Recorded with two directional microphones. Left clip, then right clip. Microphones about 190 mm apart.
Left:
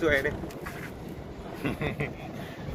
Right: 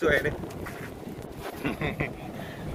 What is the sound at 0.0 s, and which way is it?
Speech, centre (ahead or behind).